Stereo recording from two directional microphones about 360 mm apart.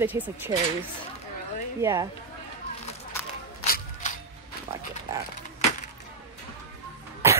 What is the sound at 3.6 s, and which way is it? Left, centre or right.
Music, left.